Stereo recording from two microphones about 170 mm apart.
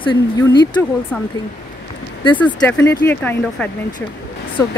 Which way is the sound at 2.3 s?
10° left (ahead or behind).